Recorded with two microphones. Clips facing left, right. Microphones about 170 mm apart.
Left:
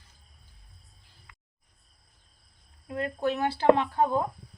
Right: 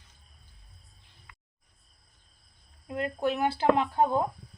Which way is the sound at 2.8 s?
20° right (ahead or behind).